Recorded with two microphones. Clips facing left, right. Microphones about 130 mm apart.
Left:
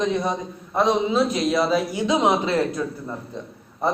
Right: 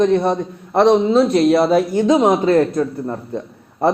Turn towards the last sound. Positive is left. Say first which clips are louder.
# right 7 dB
turn(degrees=-60)  # may be behind; listen again after turning